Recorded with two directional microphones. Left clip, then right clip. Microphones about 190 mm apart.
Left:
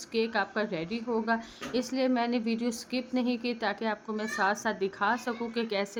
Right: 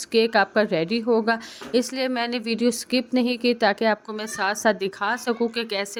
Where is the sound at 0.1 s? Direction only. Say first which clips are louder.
Right 10 dB; 45° right (ahead or behind).